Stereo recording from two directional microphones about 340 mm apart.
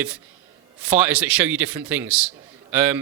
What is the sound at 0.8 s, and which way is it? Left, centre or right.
A man's voice, centre.